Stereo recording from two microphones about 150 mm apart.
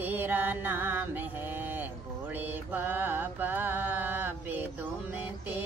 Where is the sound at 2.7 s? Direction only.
15° right (ahead or behind).